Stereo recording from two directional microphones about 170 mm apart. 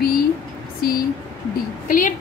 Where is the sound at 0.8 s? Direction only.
60° left (ahead or behind).